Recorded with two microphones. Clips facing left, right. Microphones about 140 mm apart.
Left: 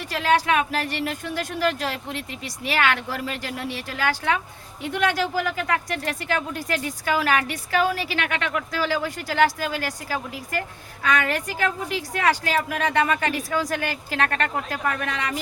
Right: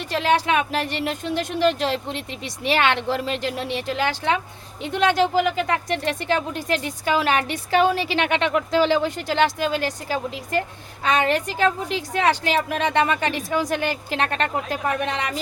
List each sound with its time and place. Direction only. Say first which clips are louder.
0.1 s speech: right 1 dB; 25° right (ahead or behind)